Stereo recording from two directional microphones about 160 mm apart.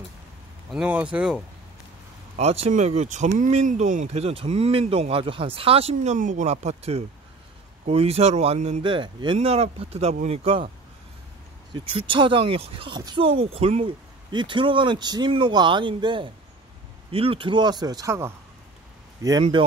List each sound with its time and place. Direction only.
0.7 s speech: 5° right (ahead or behind)
2.3 s speech: 40° right (ahead or behind)
8.8 s speech: 30° right (ahead or behind)
11.7 s speech: 30° right (ahead or behind)